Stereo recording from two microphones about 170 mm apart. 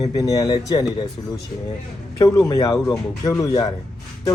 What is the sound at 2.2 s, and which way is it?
Speech, 20° left (ahead or behind).